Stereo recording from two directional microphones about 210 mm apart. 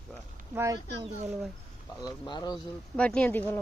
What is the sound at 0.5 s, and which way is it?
Speech, 15° right (ahead or behind).